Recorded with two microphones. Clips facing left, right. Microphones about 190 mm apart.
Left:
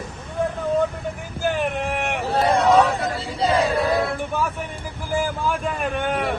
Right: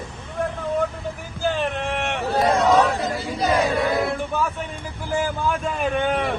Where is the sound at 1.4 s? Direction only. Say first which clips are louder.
Left 1 dB; 15° left (ahead or behind).